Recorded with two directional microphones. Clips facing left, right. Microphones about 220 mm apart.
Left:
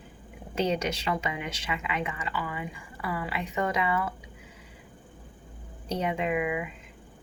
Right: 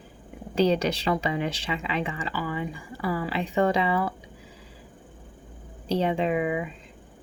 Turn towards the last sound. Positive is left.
turn(degrees=-35)  # may be behind; listen again after turning